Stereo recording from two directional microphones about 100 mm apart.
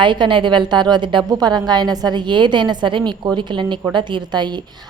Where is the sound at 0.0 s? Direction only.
50° right (ahead or behind).